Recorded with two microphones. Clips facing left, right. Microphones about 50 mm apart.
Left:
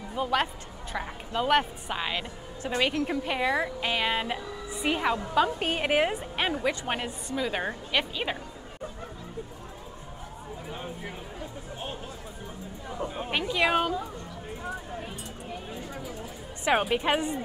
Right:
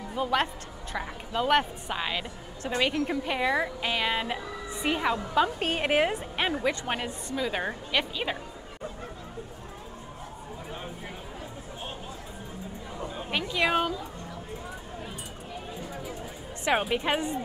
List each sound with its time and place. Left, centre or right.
0.1 s a woman's voice: centre
12.9 s chatter: centre
13.3 s a sound: centre
16.7 s a woman's voice: centre